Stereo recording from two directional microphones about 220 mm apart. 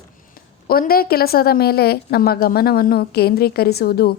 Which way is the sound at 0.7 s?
40° left (ahead or behind).